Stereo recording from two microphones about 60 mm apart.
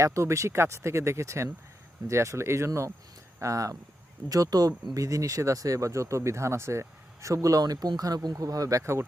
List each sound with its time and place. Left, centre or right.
0.0 s speech: right
3.4 s speech: right
4.3 s speech: right
4.9 s speech: right
8.8 s speech: right